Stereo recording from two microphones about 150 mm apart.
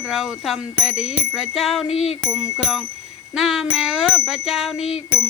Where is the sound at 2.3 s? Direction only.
5° right (ahead or behind).